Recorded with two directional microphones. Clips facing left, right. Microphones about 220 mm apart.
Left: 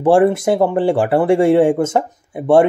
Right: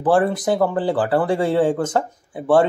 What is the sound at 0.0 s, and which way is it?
Speech, 25° left (ahead or behind).